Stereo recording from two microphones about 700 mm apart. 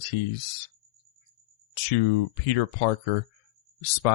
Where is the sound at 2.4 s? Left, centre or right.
Left.